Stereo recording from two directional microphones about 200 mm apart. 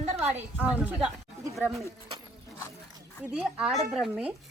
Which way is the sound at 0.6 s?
5° right (ahead or behind).